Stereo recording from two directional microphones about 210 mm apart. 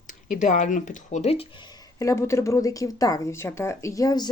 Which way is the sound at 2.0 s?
15° left (ahead or behind).